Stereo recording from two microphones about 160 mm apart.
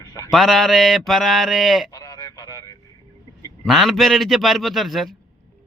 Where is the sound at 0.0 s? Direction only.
25° left (ahead or behind).